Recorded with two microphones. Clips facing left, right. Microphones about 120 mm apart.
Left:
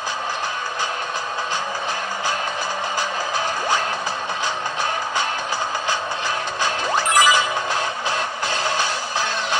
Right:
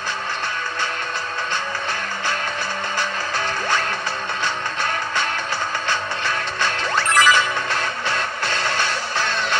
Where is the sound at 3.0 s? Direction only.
10° left (ahead or behind).